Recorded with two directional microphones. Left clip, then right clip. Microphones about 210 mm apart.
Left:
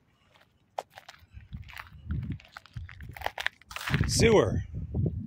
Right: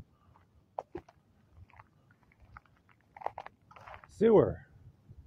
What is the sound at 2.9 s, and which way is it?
Crunch, 15° left (ahead or behind).